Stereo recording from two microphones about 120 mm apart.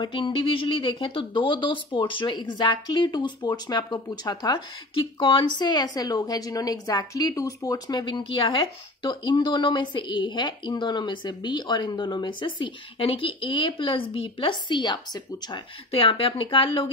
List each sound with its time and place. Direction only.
0.0 s speech: 40° left (ahead or behind)
15.9 s speech: 50° left (ahead or behind)